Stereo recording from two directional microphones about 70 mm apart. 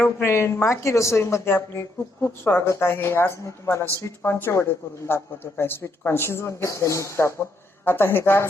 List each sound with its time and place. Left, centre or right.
0.0 s a woman's voice: left